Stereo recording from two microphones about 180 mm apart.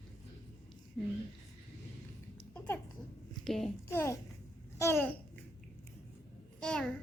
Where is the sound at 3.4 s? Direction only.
Centre (ahead or behind).